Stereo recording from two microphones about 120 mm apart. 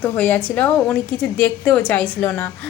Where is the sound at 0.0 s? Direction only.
15° left (ahead or behind).